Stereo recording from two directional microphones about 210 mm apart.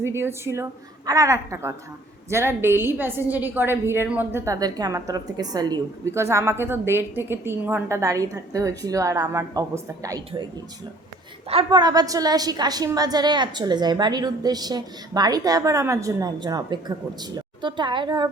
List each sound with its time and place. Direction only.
0.0 s a woman's voice: 10° right (ahead or behind)